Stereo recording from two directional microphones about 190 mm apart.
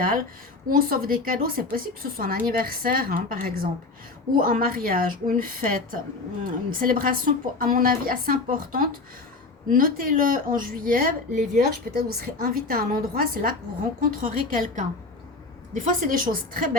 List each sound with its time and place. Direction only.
0.7 s a woman's voice: 50° right (ahead or behind)